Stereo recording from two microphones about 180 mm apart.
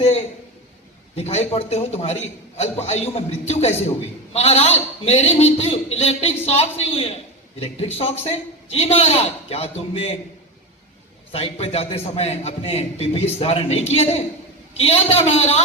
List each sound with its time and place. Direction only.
1.1 s a man's voice: 35° left (ahead or behind)
11.3 s a man's voice: 35° left (ahead or behind)